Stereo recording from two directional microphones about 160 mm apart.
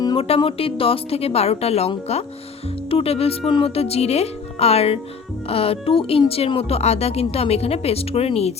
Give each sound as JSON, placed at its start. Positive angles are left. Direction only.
{"t": 0.0, "sound": "speech", "side_deg": 30}